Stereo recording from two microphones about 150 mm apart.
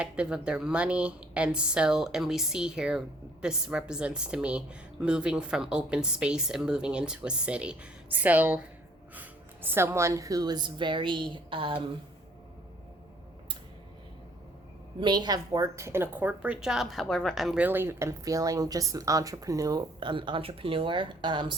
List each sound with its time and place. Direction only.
0.0 s a woman's voice: 5° right (ahead or behind); by 11.8 s 35° right (ahead or behind)
15.0 s a woman's voice: 30° right (ahead or behind)